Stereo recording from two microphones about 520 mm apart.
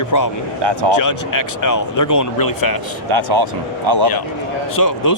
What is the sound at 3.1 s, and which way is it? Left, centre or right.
Speech, right.